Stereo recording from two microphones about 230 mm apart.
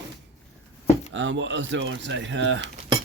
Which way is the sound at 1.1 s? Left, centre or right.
Right.